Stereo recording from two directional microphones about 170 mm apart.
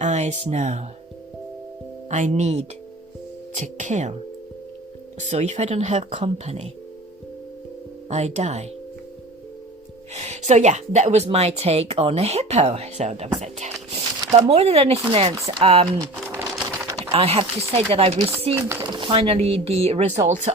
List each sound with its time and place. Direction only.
0.0 s speech: 40° right (ahead or behind)
2.0 s speech: 40° right (ahead or behind)
5.3 s speech: 40° right (ahead or behind)
8.1 s speech: 40° right (ahead or behind)
10.2 s speech: 40° right (ahead or behind)
14.3 s speech: 30° right (ahead or behind)
16.3 s typewriter: 15° right (ahead or behind)
17.0 s speech: 35° right (ahead or behind)